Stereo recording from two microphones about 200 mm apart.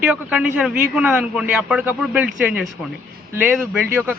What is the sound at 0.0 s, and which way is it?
A man's voice, 5° right (ahead or behind).